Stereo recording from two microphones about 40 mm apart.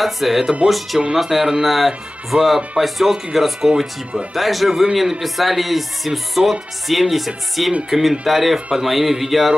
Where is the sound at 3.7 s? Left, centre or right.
Right.